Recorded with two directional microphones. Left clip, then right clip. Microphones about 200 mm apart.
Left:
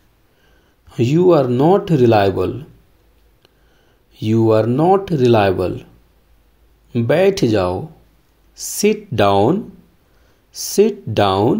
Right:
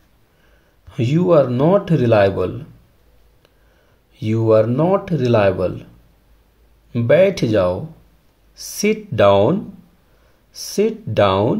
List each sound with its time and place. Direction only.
0.8 s speech: 25° left (ahead or behind)
4.1 s speech: 25° left (ahead or behind)
6.9 s speech: 25° left (ahead or behind)